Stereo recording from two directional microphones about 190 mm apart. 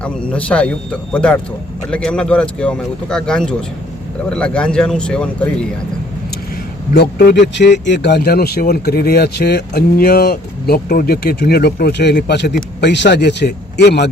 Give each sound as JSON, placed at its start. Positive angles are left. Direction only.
{"t": 0.0, "sound": "speech", "side_deg": 5}
{"t": 6.9, "sound": "speech", "side_deg": 60}